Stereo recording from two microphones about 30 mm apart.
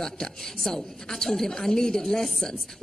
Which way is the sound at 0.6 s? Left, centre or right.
Centre.